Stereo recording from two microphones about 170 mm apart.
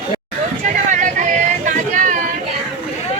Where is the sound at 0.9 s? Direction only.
45° right (ahead or behind).